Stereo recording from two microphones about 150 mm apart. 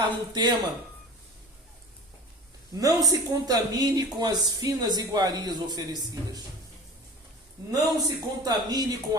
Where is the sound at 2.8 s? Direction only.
25° right (ahead or behind).